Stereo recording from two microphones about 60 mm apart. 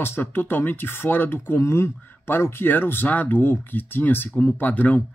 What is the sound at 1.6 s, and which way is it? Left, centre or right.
Speech, left.